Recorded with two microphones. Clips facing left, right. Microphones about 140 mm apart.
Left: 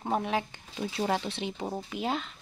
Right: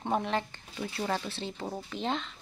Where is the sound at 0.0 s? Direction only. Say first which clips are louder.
Left 1 dB; 5° left (ahead or behind).